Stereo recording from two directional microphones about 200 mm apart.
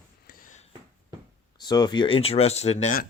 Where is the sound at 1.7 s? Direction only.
20° left (ahead or behind).